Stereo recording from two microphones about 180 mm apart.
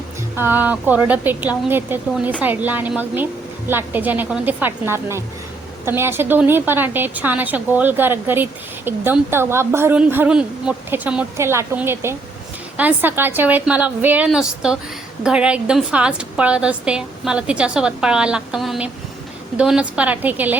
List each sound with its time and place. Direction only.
0.3 s a woman's voice: 10° right (ahead or behind)